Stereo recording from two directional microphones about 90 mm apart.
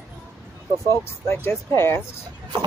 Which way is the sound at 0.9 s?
30° left (ahead or behind).